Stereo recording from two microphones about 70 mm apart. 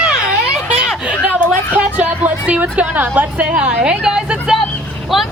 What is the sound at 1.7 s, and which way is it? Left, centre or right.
Music, right.